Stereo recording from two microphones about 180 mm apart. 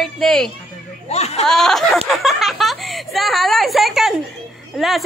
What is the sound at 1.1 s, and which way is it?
Speech, 35° left (ahead or behind).